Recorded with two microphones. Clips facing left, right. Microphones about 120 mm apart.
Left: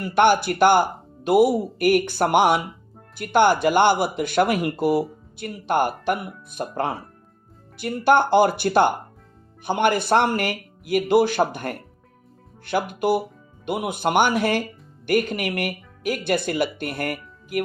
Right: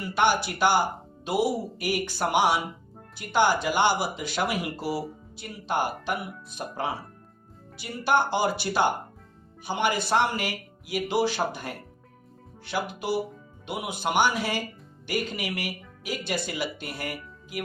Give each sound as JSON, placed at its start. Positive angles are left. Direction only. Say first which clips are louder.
{"t": 0.0, "sound": "speech", "louder": "left 6 dB", "side_deg": 55}